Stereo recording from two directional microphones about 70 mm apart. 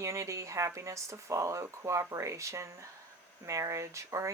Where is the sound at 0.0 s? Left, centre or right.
Right.